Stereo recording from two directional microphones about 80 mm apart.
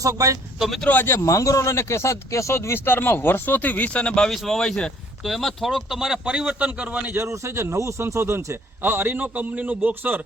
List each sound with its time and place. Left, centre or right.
0.0 s speech: right
0.6 s speech: centre
0.9 s speech: left
1.3 s speech: left; by 7.2 s centre
7.2 s a man's voice: right